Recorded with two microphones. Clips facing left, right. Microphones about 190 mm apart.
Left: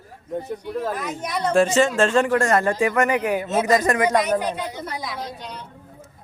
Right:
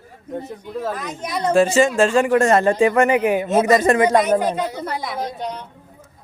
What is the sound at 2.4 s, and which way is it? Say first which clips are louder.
Speech: right 4 dB; 25° right (ahead or behind).